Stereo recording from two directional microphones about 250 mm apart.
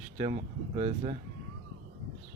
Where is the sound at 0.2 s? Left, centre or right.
Right.